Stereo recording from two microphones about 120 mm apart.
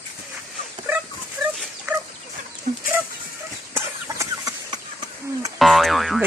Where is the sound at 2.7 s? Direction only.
90° right.